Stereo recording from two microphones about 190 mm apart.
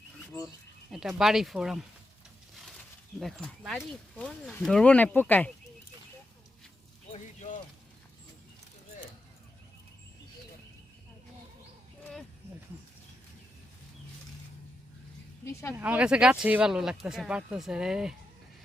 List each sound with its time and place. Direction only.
0.9 s speech: centre (ahead or behind)
3.2 s speech: centre (ahead or behind)
7.1 s speech: 40° left (ahead or behind)
15.7 s speech: 10° right (ahead or behind)